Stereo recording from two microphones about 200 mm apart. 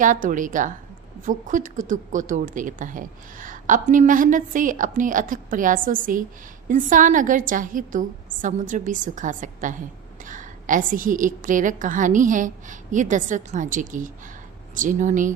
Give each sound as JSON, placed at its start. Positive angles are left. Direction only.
{"t": 0.0, "sound": "speech", "side_deg": -40}